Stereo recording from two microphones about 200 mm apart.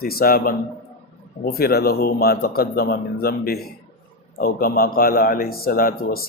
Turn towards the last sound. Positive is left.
turn(degrees=45)  # may be behind; listen again after turning